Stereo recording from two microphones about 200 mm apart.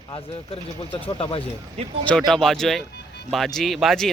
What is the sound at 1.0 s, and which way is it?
Speech, 25° left (ahead or behind).